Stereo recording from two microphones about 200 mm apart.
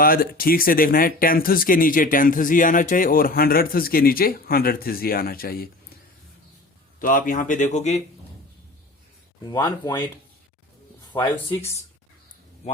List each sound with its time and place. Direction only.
0.0 s speech: 45° left (ahead or behind)
7.0 s speech: 45° left (ahead or behind)
9.4 s speech: 20° left (ahead or behind)